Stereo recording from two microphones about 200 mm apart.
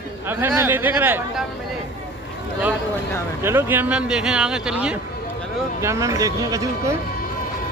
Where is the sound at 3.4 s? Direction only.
10° right (ahead or behind).